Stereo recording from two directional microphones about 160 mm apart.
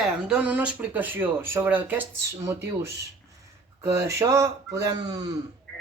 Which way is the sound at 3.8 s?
15° right (ahead or behind).